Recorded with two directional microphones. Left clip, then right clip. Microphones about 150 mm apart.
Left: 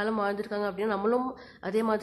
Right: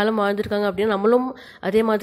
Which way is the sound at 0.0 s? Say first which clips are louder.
Right 8 dB; 25° right (ahead or behind).